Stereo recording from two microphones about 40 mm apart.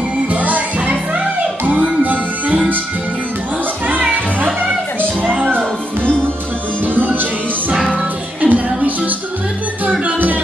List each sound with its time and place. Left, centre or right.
0.3 s music: right
3.8 s music: right
7.0 s music: right
7.9 s music: right